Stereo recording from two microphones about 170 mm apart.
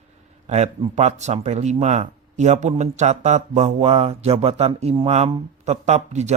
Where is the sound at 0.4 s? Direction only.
40° right (ahead or behind).